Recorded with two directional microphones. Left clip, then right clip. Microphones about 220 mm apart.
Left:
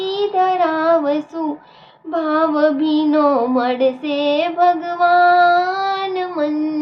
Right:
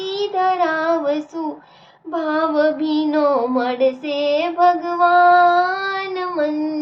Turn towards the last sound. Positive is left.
turn(degrees=10)  # may be behind; listen again after turning